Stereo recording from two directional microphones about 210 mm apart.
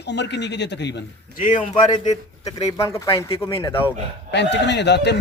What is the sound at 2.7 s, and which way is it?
Speech, 15° left (ahead or behind).